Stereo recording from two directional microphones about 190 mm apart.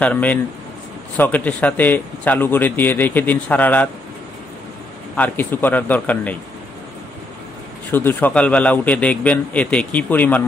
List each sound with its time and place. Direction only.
0.0 s a man's voice: 10° left (ahead or behind)
5.1 s a man's voice: 10° left (ahead or behind)
7.9 s a man's voice: 10° left (ahead or behind)